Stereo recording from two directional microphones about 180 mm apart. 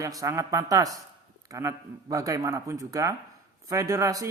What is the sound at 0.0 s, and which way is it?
A man's voice, 20° right (ahead or behind).